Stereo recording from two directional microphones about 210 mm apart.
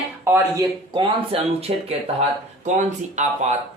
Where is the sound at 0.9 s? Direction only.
25° right (ahead or behind).